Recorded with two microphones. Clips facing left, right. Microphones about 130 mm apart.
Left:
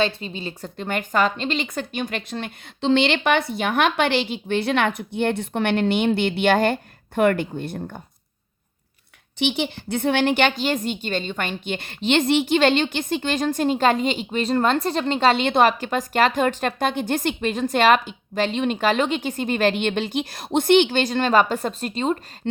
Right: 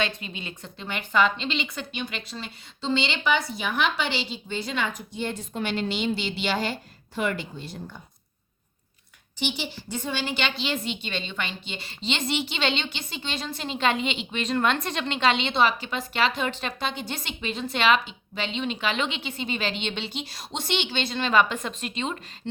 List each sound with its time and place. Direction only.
0.0 s speech: 30° left (ahead or behind)
0.8 s a woman's voice: 50° left (ahead or behind)
9.4 s a woman's voice: 65° left (ahead or behind); by 22.2 s 40° left (ahead or behind)